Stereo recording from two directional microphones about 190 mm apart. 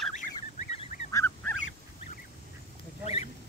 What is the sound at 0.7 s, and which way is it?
Goose, 30° left (ahead or behind).